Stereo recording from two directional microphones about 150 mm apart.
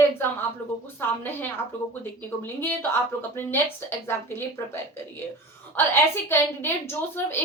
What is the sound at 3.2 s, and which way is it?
A woman's voice, 15° left (ahead or behind).